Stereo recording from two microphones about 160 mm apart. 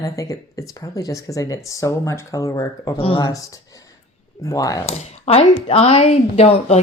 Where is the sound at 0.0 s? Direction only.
20° left (ahead or behind).